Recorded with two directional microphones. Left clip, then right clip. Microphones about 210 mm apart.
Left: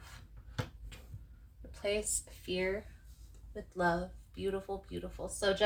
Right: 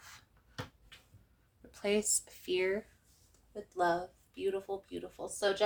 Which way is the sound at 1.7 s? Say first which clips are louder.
Right 2 dB; 50° right (ahead or behind).